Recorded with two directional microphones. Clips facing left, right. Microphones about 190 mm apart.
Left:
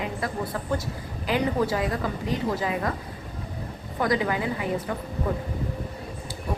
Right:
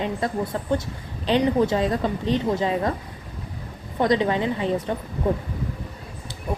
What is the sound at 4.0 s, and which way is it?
Speech, 25° right (ahead or behind).